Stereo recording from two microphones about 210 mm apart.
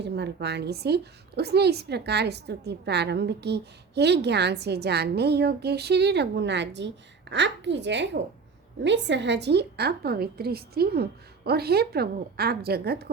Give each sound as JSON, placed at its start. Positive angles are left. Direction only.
{"t": 0.0, "sound": "a woman's voice", "side_deg": -55}